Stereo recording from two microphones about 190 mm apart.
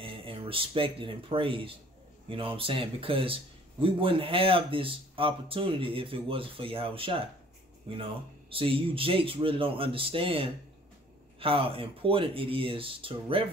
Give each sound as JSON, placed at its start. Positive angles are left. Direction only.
{"t": 0.0, "sound": "speech", "side_deg": -30}